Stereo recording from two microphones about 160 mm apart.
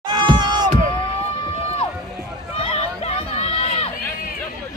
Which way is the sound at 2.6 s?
40° left (ahead or behind).